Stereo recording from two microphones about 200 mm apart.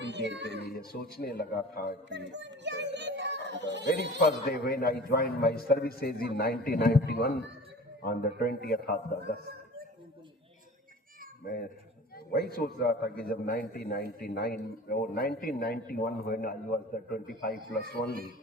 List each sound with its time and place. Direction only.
0.0 s a woman's voice: 60° right (ahead or behind)
0.6 s a man's voice: 50° left (ahead or behind)
2.0 s a sound: 60° right (ahead or behind)
4.4 s a man's voice: 50° left (ahead or behind)
8.4 s a man's voice: 50° left (ahead or behind)
11.4 s a man's voice: 45° left (ahead or behind)